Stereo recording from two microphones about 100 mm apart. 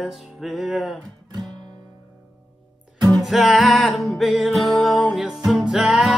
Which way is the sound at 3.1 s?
Centre (ahead or behind).